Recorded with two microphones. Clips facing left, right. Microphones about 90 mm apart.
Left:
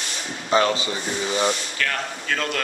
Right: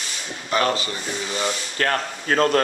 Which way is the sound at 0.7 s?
20° left (ahead or behind).